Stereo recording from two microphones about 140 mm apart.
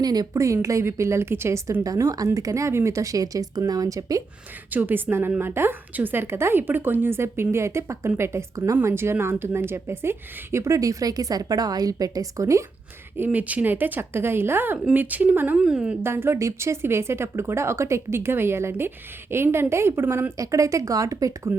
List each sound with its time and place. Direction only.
0.0 s a woman's voice: 30° right (ahead or behind)
4.7 s a woman's voice: 15° right (ahead or behind)